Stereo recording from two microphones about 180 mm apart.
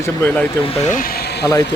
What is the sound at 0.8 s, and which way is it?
Speech, 45° left (ahead or behind).